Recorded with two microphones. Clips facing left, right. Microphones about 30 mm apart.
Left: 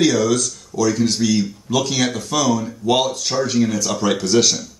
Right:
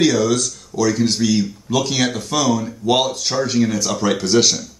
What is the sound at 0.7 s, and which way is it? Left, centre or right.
Speech, right.